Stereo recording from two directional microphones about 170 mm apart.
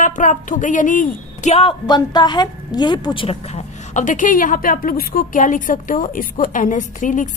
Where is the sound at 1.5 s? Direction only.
30° left (ahead or behind).